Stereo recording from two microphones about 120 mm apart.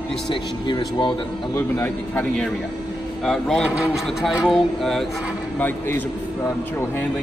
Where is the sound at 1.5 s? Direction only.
15° left (ahead or behind).